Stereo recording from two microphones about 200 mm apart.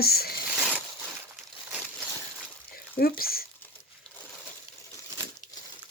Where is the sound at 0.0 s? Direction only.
50° left (ahead or behind).